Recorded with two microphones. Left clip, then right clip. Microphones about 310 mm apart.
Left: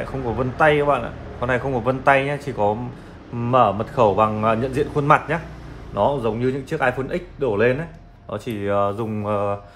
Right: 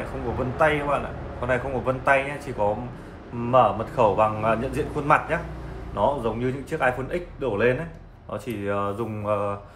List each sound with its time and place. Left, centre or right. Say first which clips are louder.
0.6 s a man's voice: left 5 dB; left